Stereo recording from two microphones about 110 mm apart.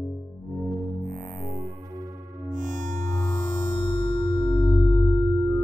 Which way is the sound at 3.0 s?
90° right.